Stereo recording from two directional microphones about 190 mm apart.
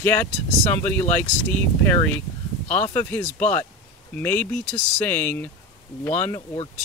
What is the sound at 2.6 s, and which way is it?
Speech, 40° left (ahead or behind).